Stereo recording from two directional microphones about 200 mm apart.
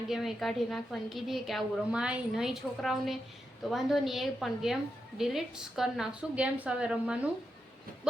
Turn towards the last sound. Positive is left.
turn(degrees=-5)  # may be behind; listen again after turning